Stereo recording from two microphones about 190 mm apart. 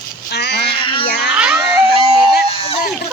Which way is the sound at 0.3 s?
60° left (ahead or behind).